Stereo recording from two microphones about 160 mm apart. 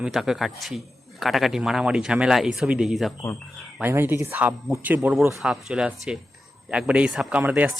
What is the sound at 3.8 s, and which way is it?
Speech, 15° right (ahead or behind).